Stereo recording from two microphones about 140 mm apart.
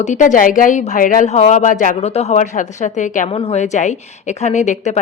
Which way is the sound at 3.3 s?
45° left (ahead or behind).